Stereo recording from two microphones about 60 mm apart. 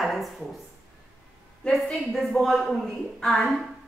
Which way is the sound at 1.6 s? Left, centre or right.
Centre.